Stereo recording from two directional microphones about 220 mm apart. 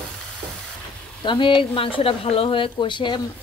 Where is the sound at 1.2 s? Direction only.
20° left (ahead or behind).